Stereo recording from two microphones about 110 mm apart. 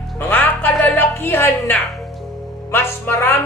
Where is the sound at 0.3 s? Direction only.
15° left (ahead or behind).